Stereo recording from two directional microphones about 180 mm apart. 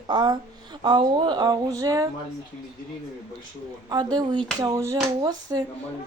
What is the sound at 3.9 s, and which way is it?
Speech, 25° right (ahead or behind).